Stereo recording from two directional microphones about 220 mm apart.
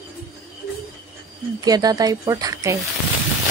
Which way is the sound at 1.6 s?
15° right (ahead or behind).